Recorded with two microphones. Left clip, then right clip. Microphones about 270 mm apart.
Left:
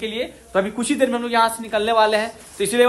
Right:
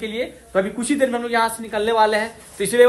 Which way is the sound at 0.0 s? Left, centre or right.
Centre.